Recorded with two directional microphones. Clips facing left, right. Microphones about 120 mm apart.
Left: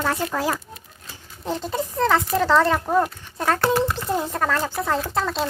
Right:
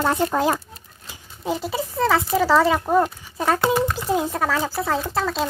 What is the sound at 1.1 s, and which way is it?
Speech, 10° right (ahead or behind).